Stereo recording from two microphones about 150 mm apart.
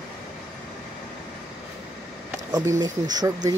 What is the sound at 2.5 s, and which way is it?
Speech, 25° right (ahead or behind).